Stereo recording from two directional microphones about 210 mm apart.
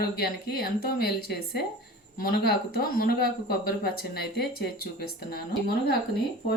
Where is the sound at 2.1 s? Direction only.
45° left (ahead or behind).